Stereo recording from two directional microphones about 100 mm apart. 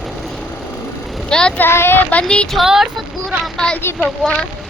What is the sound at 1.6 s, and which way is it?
Speech, 25° left (ahead or behind).